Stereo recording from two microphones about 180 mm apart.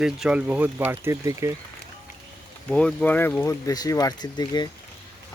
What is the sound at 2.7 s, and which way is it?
Speech, 5° left (ahead or behind).